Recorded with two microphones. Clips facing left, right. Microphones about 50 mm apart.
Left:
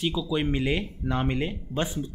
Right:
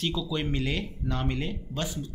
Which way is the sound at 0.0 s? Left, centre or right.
Centre.